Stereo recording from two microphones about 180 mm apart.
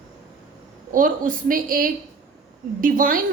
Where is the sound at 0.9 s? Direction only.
50° right (ahead or behind).